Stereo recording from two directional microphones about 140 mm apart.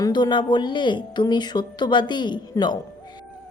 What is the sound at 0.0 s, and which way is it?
A woman's voice, 30° left (ahead or behind).